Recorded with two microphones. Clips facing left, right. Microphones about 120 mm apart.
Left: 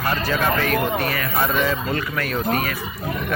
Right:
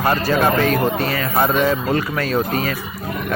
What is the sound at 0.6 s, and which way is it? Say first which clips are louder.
Speech: right 3 dB; 25° right (ahead or behind).